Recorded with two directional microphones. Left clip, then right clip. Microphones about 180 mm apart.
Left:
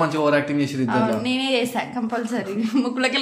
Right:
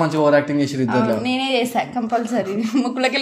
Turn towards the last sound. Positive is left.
turn(degrees=-20)  # may be behind; listen again after turning